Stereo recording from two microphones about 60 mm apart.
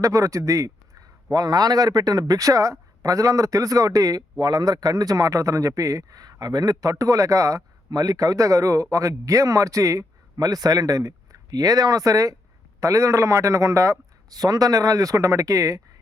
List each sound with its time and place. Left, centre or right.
0.0 s a man's voice: right
7.0 s a man's voice: right
12.8 s a man's voice: right